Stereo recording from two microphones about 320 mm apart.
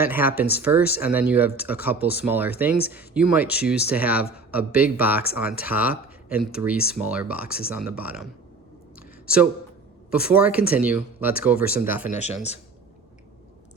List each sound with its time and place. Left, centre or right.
0.0 s speech: centre
9.0 s a sound: centre
10.1 s speech: centre
12.1 s speech: left